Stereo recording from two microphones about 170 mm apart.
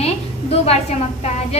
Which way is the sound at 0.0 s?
35° left (ahead or behind).